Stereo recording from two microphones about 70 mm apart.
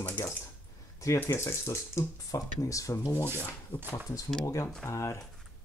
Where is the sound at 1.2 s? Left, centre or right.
Left.